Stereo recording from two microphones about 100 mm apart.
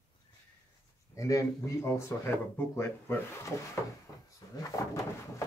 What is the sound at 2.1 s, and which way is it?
Speech, 20° left (ahead or behind).